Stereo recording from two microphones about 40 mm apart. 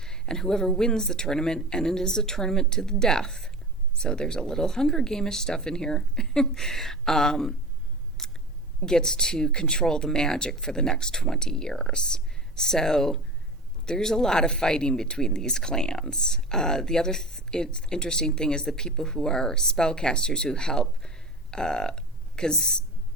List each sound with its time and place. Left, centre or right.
0.0 s speech: centre
8.2 s scissors: centre
8.8 s speech: centre